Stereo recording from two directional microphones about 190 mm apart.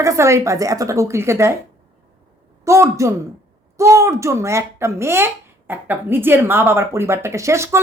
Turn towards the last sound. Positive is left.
turn(degrees=-15)  # may be behind; listen again after turning